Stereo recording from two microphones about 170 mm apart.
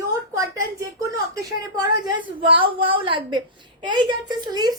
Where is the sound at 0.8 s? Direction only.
20° right (ahead or behind).